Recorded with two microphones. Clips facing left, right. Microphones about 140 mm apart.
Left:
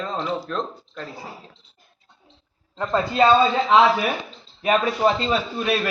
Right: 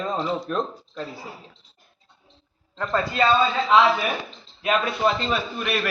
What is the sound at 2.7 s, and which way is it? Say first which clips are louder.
Speech: left 3 dB; 15° left (ahead or behind).